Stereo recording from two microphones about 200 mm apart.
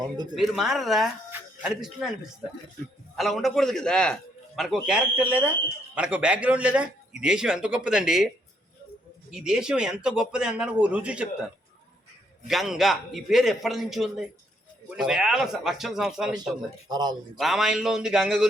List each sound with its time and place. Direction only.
0.3 s a man's voice: centre (ahead or behind)
3.2 s a man's voice: centre (ahead or behind)
9.3 s a man's voice: 5° right (ahead or behind)
12.5 s a man's voice: centre (ahead or behind)
16.9 s speech: 20° right (ahead or behind)
17.3 s a man's voice: centre (ahead or behind)